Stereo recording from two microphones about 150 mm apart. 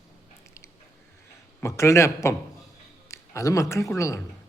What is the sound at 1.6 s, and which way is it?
A man's voice, 20° left (ahead or behind).